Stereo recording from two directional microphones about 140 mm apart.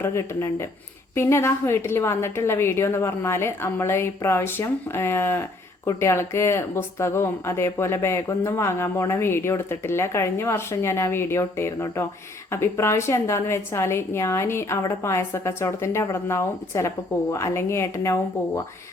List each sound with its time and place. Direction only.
0.0 s a woman's voice: 20° left (ahead or behind)